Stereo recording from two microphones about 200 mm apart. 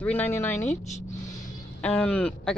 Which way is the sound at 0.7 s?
35° left (ahead or behind).